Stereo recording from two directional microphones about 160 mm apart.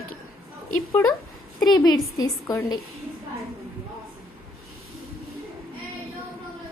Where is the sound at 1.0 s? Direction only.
15° left (ahead or behind).